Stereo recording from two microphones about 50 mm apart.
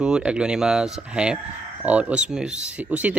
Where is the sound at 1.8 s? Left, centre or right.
Right.